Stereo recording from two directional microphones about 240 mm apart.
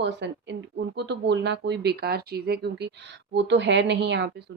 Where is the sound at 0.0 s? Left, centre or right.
Right.